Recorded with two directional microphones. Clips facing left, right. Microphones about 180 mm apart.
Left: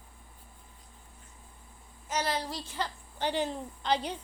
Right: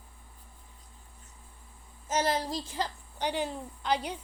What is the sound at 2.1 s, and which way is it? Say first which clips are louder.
Speech: right 3 dB; 45° right (ahead or behind).